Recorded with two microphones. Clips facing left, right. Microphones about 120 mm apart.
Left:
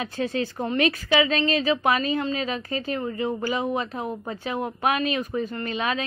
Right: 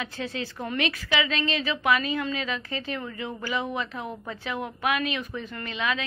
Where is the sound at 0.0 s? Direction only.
45° left (ahead or behind).